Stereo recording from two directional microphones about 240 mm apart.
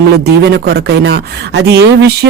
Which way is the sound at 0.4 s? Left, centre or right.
Right.